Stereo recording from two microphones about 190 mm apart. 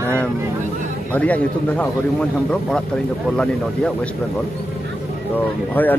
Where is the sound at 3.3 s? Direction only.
5° left (ahead or behind).